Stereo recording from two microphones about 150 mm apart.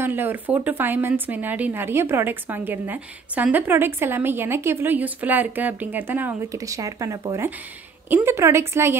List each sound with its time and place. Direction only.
0.0 s a woman's voice: 15° right (ahead or behind)